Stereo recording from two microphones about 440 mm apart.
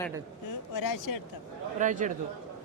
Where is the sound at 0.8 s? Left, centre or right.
Left.